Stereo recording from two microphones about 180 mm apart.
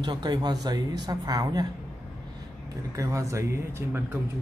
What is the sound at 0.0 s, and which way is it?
Speech, 25° right (ahead or behind).